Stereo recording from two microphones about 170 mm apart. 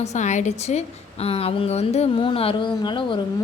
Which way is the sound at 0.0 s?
45° left (ahead or behind).